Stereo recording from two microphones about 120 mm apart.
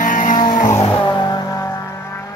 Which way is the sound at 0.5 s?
90° left.